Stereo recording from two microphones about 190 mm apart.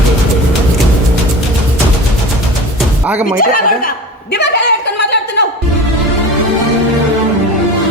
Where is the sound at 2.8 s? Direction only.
10° right (ahead or behind).